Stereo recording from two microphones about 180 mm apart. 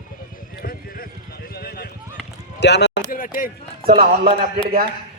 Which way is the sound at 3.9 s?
55° right (ahead or behind).